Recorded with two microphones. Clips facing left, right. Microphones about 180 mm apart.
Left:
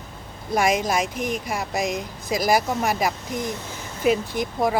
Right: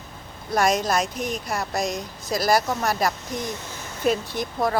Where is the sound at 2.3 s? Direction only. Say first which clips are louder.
Even; 15° left (ahead or behind).